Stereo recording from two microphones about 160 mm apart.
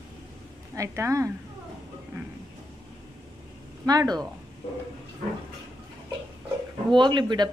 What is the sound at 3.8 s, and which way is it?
Speech, 25° right (ahead or behind).